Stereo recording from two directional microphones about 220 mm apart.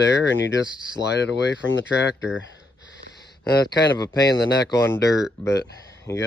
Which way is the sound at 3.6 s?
20° left (ahead or behind).